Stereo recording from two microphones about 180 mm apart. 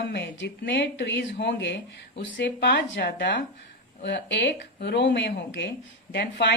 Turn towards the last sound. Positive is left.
turn(degrees=65)  # may be behind; listen again after turning